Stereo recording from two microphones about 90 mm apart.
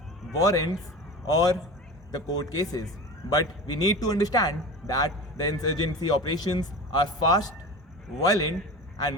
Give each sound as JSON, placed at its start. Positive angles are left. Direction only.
{"t": 0.3, "sound": "speech", "side_deg": 40}